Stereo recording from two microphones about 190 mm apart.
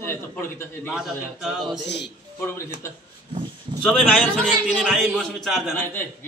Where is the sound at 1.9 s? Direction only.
65° left (ahead or behind).